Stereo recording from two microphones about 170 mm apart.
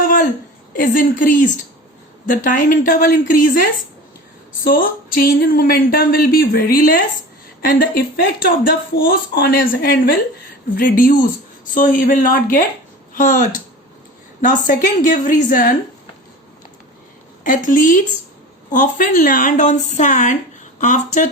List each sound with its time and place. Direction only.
0.0 s a sound: 50° left (ahead or behind)
0.8 s a woman's voice: 55° left (ahead or behind)
4.6 s a woman's voice: 55° left (ahead or behind)
17.4 s a woman's voice: 50° left (ahead or behind)